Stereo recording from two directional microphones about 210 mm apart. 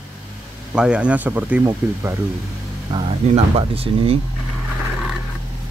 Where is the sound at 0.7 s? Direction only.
5° right (ahead or behind).